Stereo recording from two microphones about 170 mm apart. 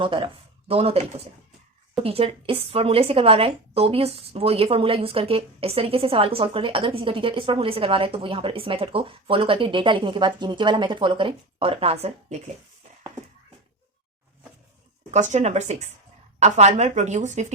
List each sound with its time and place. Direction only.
0.0 s a woman's voice: 30° right (ahead or behind)
15.1 s a woman's voice: 45° right (ahead or behind)